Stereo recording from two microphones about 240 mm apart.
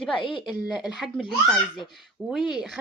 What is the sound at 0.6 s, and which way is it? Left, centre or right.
Speech, centre.